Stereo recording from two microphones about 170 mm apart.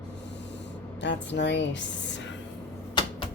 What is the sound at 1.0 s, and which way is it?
Speech, 90° left.